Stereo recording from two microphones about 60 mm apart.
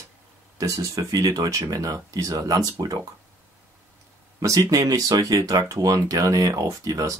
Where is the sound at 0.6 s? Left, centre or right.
Right.